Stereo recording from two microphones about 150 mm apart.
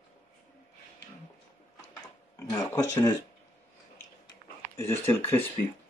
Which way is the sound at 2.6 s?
25° left (ahead or behind).